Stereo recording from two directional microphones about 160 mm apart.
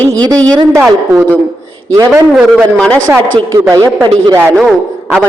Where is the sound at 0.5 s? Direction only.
15° right (ahead or behind).